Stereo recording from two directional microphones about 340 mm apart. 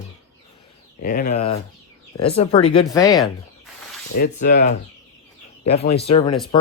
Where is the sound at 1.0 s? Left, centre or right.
Left.